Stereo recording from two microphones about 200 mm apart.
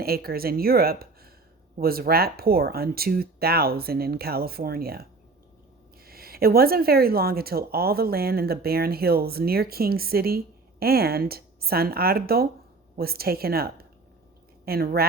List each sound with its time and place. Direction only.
0.0 s speech: 50° right (ahead or behind)
6.1 s a woman's voice: 50° right (ahead or behind)